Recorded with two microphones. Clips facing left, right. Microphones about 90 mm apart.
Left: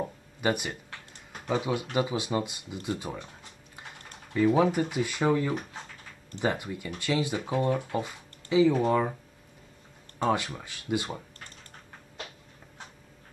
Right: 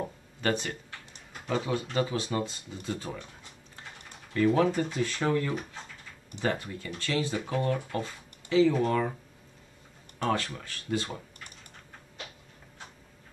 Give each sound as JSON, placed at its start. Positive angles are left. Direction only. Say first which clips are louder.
{"t": 0.0, "sound": "speech", "louder": "left 2 dB", "side_deg": 10}
{"t": 4.3, "sound": "speech", "louder": "left 1 dB", "side_deg": 15}
{"t": 10.1, "sound": "speech", "louder": "left 2 dB", "side_deg": 15}